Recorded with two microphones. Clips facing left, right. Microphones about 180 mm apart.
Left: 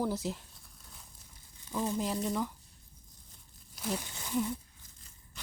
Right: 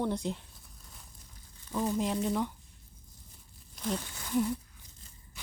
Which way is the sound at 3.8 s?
5° left (ahead or behind).